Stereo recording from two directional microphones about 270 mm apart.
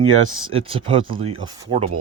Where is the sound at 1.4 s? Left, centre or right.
Right.